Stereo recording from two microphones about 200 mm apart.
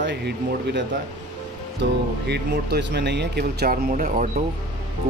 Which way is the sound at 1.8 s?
55° right (ahead or behind).